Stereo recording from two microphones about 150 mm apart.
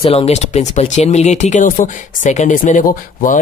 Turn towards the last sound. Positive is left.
turn(degrees=60)  # may be behind; listen again after turning